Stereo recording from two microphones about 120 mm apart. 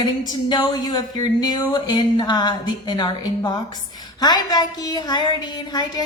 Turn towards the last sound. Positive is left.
turn(degrees=35)  # may be behind; listen again after turning